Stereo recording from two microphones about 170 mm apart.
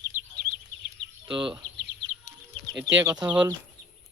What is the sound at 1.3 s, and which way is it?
Speech, 30° right (ahead or behind).